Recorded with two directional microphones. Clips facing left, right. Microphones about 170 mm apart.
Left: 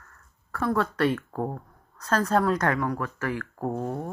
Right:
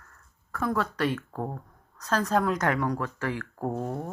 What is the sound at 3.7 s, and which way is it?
Speech, 10° left (ahead or behind).